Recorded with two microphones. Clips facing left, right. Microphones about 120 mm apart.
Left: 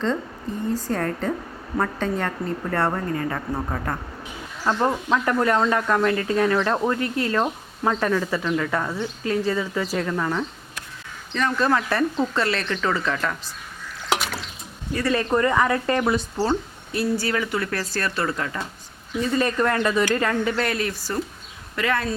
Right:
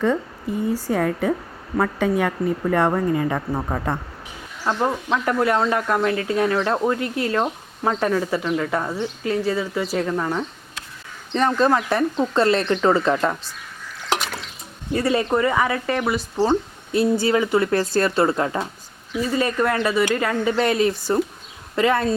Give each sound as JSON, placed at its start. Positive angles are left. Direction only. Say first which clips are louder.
{"t": 0.7, "sound": "speech", "louder": "right 2 dB", "side_deg": -10}
{"t": 11.3, "sound": "speech", "louder": "right 4 dB", "side_deg": -30}
{"t": 11.7, "sound": "speech", "louder": "right 2 dB", "side_deg": -15}
{"t": 12.3, "sound": "speech", "louder": "right 6 dB", "side_deg": -30}
{"t": 14.1, "sound": "a sound", "louder": "even", "side_deg": 0}
{"t": 14.9, "sound": "speech", "louder": "right 3 dB", "side_deg": -25}
{"t": 15.2, "sound": "speech", "louder": "right 1 dB", "side_deg": -10}
{"t": 16.5, "sound": "speech", "louder": "right 4 dB", "side_deg": -25}
{"t": 19.1, "sound": "speech", "louder": "right 1 dB", "side_deg": -5}